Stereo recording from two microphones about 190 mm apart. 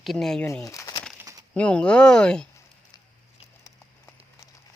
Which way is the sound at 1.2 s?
20° right (ahead or behind).